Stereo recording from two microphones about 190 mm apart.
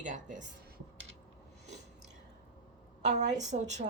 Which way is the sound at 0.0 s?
40° right (ahead or behind).